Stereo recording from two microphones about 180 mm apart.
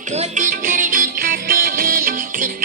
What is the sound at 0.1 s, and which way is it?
Music, 40° right (ahead or behind).